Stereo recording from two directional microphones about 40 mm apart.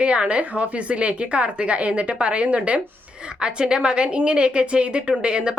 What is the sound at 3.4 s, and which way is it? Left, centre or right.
Speech, right.